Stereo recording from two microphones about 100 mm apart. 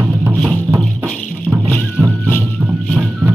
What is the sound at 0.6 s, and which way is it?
Music, 25° right (ahead or behind).